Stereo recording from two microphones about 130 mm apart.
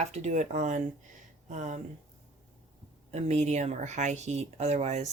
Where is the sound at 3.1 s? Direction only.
60° right (ahead or behind).